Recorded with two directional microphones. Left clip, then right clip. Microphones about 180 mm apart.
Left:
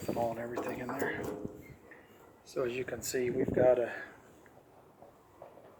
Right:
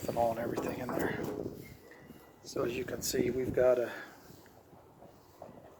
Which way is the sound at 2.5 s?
15° right (ahead or behind).